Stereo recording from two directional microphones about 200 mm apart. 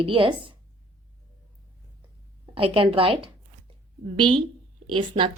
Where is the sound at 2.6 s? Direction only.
25° right (ahead or behind).